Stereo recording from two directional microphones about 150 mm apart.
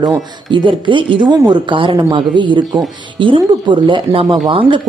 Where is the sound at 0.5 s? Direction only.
35° right (ahead or behind).